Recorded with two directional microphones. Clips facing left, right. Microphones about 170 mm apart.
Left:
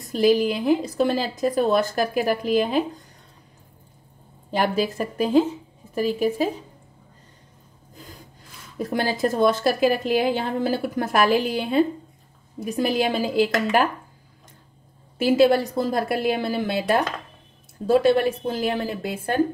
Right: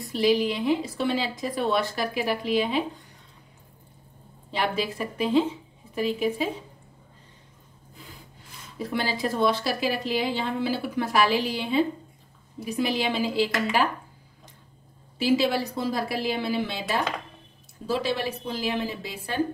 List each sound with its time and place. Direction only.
0.1 s a woman's voice: 45° left (ahead or behind)
4.5 s a woman's voice: 45° left (ahead or behind)
7.9 s sawing: 40° left (ahead or behind)
8.7 s a woman's voice: 50° left (ahead or behind)
15.1 s a woman's voice: 50° left (ahead or behind)